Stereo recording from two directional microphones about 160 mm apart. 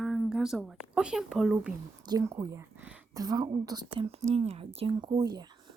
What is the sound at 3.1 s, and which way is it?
A woman's voice, 25° right (ahead or behind).